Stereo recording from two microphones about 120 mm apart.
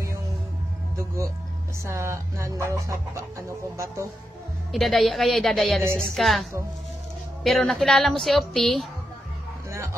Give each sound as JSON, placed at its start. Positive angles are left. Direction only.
{"t": 0.9, "sound": "speech", "side_deg": -25}
{"t": 4.7, "sound": "a woman's voice", "side_deg": 0}
{"t": 7.4, "sound": "a woman's voice", "side_deg": 0}